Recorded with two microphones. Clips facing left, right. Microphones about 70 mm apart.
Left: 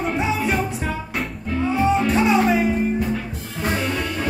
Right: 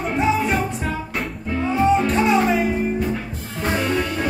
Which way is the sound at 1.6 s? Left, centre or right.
Centre.